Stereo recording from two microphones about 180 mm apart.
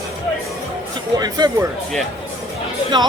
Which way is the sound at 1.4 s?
25° right (ahead or behind).